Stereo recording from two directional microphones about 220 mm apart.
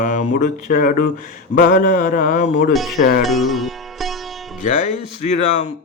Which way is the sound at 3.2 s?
Centre (ahead or behind).